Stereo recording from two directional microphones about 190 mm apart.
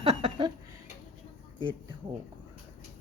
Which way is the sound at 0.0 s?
30° right (ahead or behind).